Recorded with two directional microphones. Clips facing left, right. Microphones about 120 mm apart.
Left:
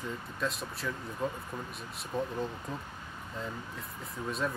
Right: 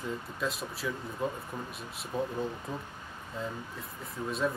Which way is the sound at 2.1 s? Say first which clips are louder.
Right 1 dB; 5° right (ahead or behind).